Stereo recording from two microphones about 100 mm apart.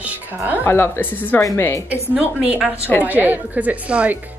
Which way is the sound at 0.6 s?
25° left (ahead or behind).